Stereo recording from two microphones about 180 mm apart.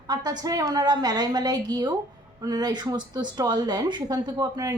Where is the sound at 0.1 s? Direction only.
20° right (ahead or behind).